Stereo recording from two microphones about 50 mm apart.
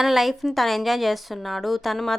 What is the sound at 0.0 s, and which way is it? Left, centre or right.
A woman's voice, centre.